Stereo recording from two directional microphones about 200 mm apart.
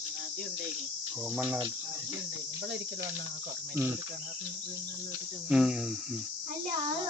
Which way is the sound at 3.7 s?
10° right (ahead or behind).